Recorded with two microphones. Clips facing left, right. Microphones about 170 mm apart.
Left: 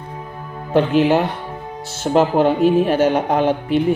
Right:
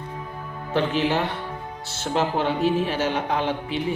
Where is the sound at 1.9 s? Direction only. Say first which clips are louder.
Left 8 dB; 45° left (ahead or behind).